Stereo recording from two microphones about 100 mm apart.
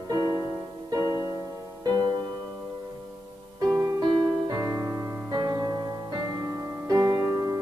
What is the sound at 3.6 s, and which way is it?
Music, 35° right (ahead or behind).